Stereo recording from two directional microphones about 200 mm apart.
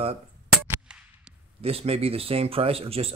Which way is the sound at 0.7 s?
5° right (ahead or behind).